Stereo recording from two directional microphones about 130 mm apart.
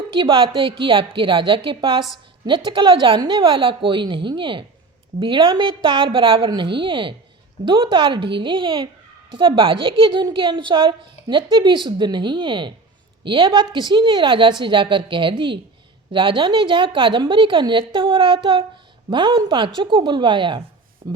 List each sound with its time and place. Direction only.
0.1 s a woman's voice: 40° right (ahead or behind)